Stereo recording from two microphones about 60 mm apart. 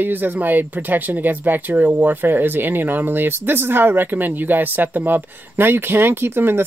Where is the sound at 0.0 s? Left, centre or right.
Right.